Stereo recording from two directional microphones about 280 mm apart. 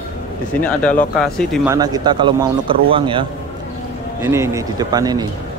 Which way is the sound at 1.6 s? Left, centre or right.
Centre.